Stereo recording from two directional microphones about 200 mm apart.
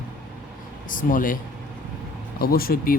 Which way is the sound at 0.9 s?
40° left (ahead or behind).